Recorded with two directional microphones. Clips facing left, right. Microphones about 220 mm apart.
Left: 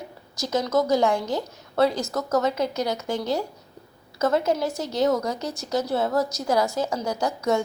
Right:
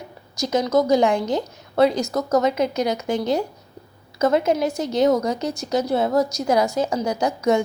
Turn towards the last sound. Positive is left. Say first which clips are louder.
# right 4 dB
turn(degrees=-15)  # may be behind; listen again after turning